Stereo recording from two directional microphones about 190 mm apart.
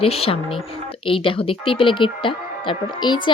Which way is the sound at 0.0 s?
30° left (ahead or behind).